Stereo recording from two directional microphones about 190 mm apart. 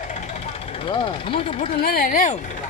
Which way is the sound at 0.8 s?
25° left (ahead or behind).